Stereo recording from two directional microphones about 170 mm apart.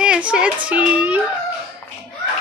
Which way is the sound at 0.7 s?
5° right (ahead or behind).